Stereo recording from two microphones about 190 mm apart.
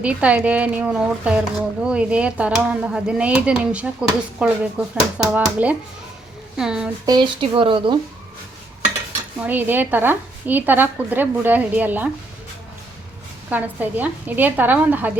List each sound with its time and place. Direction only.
0.0 s a woman's voice: 5° right (ahead or behind)
7.0 s speech: 20° right (ahead or behind)
9.4 s a woman's voice: 10° right (ahead or behind)
13.5 s a woman's voice: 10° right (ahead or behind)